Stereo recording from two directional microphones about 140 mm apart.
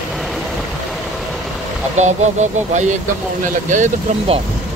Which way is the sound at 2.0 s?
55° right (ahead or behind).